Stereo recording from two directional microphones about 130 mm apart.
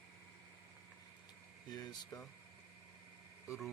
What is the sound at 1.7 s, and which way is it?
Speech, 30° left (ahead or behind).